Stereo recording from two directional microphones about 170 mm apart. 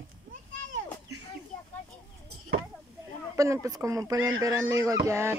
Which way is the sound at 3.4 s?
20° right (ahead or behind).